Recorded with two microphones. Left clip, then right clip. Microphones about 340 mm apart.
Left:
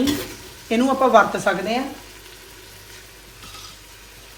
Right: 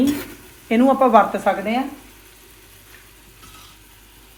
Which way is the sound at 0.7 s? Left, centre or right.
Centre.